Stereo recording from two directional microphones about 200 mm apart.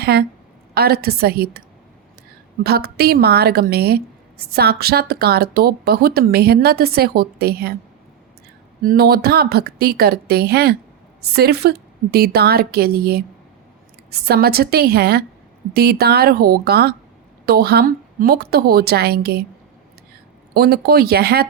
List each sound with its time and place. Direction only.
0.0 s a woman's voice: 50° right (ahead or behind)
2.6 s a woman's voice: 50° right (ahead or behind)
8.8 s a woman's voice: 45° right (ahead or behind)
20.5 s a woman's voice: 50° right (ahead or behind)